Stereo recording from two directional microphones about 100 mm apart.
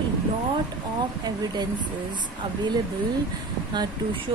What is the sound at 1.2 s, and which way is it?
Speech, 45° right (ahead or behind).